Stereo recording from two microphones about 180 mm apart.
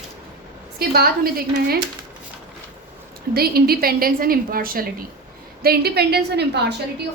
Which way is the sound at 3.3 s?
60° right (ahead or behind).